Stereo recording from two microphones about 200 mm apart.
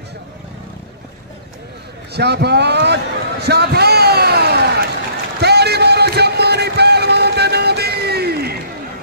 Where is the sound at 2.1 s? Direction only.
55° right (ahead or behind).